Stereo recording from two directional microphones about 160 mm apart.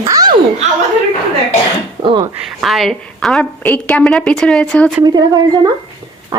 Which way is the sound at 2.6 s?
Centre (ahead or behind).